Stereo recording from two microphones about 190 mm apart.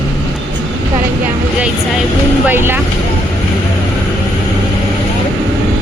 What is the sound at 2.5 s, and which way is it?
Speech, 10° right (ahead or behind).